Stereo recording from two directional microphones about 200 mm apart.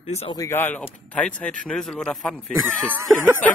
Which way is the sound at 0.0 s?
30° left (ahead or behind).